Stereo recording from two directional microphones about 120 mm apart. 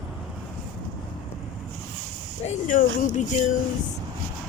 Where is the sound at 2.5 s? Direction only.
90° left.